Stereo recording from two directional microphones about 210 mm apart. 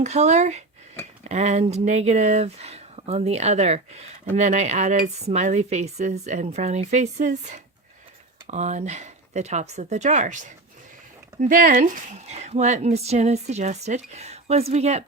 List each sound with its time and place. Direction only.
0.0 s speech: 30° right (ahead or behind)